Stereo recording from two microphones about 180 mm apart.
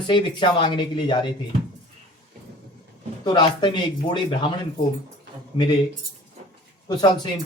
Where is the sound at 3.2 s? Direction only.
25° left (ahead or behind).